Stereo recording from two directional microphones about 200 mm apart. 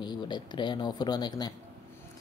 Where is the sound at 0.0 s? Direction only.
20° left (ahead or behind).